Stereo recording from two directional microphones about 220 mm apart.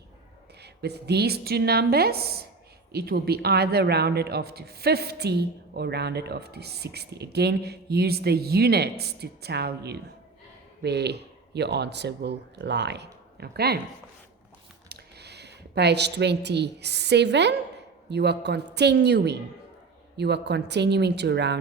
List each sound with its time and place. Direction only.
0.6 s speech: 50° right (ahead or behind)
14.8 s a woman's voice: 50° right (ahead or behind)